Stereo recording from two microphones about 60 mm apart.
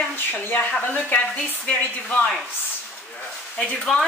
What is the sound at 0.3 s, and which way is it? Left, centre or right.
Speech, left.